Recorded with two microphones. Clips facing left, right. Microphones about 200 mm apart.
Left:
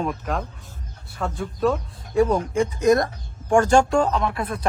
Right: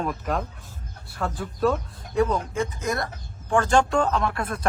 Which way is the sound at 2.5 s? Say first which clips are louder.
Left 9 dB; 15° left (ahead or behind).